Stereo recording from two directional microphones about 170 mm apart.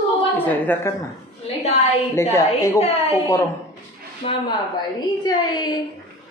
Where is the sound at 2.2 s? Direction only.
15° left (ahead or behind).